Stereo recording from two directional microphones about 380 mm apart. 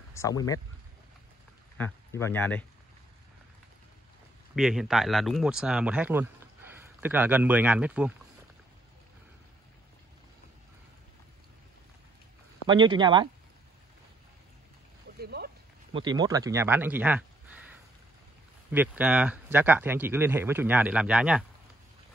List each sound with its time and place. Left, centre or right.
0.1 s speech: centre
1.8 s speech: centre
4.6 s speech: centre
12.6 s speech: centre
15.1 s a sound: right
15.9 s speech: centre
18.7 s speech: centre